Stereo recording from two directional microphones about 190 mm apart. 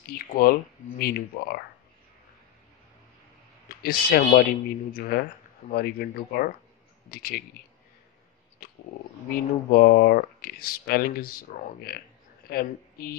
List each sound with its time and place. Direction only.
0.3 s speech: 50° left (ahead or behind)
3.8 s speech: 50° left (ahead or behind)
9.3 s a woman's voice: 50° left (ahead or behind)